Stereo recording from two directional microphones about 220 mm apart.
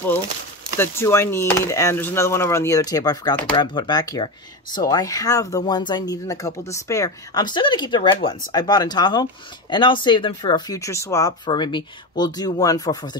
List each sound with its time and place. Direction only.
0.7 s speech: 10° left (ahead or behind)